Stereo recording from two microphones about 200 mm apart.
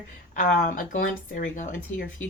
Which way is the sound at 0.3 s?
45° left (ahead or behind).